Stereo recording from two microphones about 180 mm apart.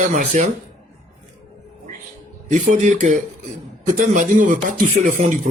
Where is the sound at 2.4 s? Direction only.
40° right (ahead or behind).